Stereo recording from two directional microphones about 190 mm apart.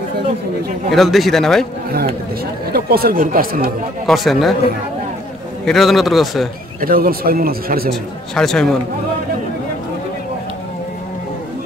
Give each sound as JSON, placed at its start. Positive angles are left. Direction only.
{"t": 0.9, "sound": "speech", "side_deg": 0}
{"t": 2.7, "sound": "speech", "side_deg": -55}
{"t": 4.0, "sound": "speech", "side_deg": 0}
{"t": 5.7, "sound": "speech", "side_deg": 0}
{"t": 6.8, "sound": "speech", "side_deg": -50}
{"t": 7.9, "sound": "speech", "side_deg": 0}